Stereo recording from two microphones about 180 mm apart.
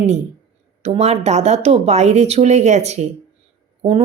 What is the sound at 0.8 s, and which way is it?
Speech, 35° right (ahead or behind).